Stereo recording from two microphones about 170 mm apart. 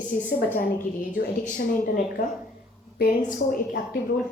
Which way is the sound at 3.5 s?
60° left (ahead or behind).